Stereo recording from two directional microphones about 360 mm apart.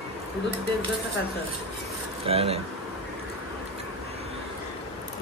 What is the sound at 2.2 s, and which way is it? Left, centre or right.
Speech, centre.